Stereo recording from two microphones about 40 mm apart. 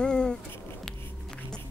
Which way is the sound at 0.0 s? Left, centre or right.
Left.